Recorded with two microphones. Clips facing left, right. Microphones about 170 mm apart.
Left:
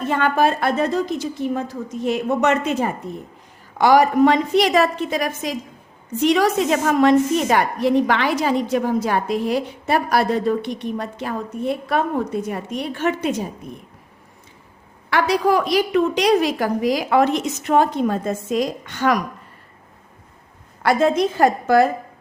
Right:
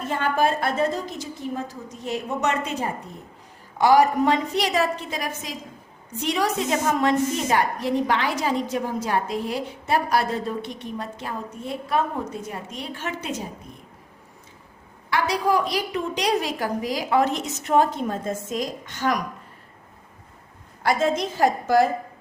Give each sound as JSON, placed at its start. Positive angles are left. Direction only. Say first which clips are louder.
{"t": 0.1, "sound": "a woman's voice", "louder": "left 4 dB", "side_deg": 75}
{"t": 2.0, "sound": "a woman's voice", "louder": "left 6 dB", "side_deg": 65}
{"t": 3.8, "sound": "a woman's voice", "louder": "left 3 dB", "side_deg": 85}
{"t": 15.1, "sound": "a woman's voice", "louder": "left 4 dB", "side_deg": 75}
{"t": 20.8, "sound": "a woman's voice", "louder": "left 5 dB", "side_deg": 60}